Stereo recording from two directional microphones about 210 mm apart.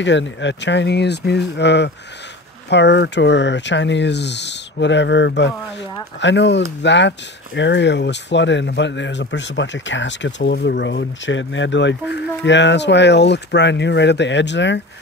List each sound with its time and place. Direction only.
0.0 s speech: 60° left (ahead or behind)